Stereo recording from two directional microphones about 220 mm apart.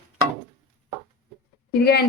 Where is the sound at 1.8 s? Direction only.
45° left (ahead or behind).